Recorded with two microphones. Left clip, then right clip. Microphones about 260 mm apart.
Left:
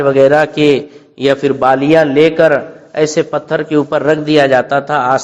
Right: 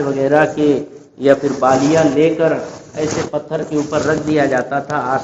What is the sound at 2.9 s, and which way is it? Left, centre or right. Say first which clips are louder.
A man's voice: left 7 dB; left.